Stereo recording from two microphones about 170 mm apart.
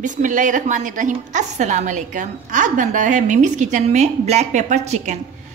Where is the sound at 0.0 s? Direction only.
50° right (ahead or behind).